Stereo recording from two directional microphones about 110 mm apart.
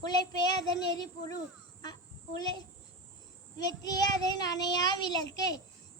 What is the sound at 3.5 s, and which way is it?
A child's voice, 35° left (ahead or behind).